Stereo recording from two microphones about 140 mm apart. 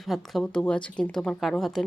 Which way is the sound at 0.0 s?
Centre (ahead or behind).